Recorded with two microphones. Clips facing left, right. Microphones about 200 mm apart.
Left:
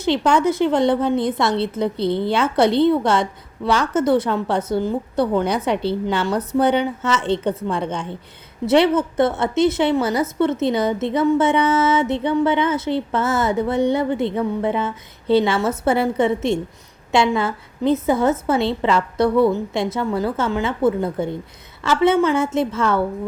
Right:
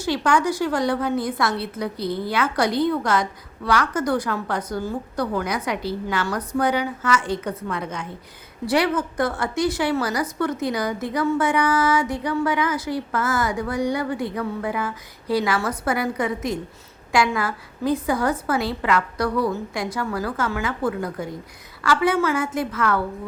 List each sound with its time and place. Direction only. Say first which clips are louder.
0.0 s a woman's voice: left 4 dB; 20° left (ahead or behind)